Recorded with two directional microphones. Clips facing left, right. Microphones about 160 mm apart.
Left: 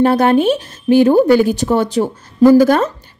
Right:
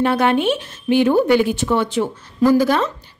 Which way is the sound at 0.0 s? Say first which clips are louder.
Left 5 dB; 40° left (ahead or behind).